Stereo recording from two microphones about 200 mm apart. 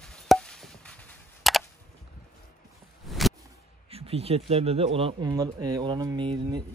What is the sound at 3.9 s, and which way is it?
Speech, 30° right (ahead or behind).